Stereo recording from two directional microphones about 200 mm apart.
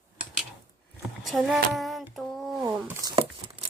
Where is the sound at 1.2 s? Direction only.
Centre (ahead or behind).